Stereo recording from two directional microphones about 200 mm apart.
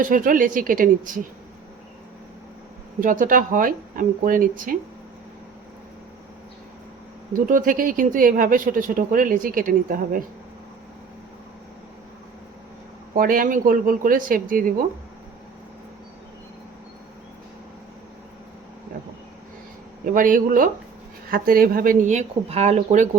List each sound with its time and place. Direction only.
0.0 s speech: 40° right (ahead or behind)
3.0 s speech: 40° right (ahead or behind)
7.3 s speech: 45° right (ahead or behind)
13.1 s speech: 45° right (ahead or behind)
20.1 s speech: 40° right (ahead or behind)